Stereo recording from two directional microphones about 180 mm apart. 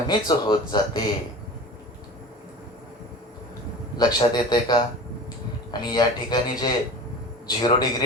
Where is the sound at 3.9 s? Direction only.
25° left (ahead or behind).